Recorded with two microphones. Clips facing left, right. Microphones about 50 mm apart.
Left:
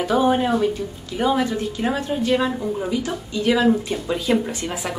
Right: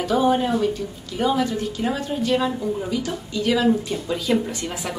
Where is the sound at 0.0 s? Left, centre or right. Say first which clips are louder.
Left 1 dB; left.